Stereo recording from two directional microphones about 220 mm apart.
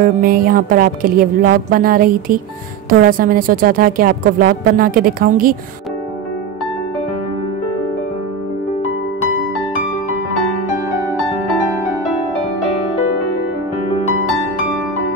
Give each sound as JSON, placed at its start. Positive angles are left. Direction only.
{"t": 0.0, "sound": "a woman's voice", "side_deg": -40}